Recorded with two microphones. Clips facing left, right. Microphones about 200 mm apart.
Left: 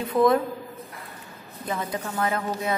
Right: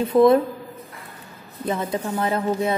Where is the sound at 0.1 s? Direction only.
25° right (ahead or behind).